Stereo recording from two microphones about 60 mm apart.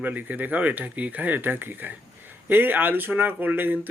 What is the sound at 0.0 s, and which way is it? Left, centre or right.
Speech, right.